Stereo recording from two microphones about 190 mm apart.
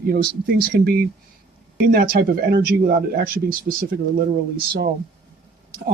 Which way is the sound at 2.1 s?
50° right (ahead or behind).